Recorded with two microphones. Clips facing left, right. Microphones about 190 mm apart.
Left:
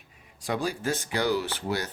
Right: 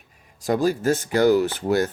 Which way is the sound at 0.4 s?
40° right (ahead or behind).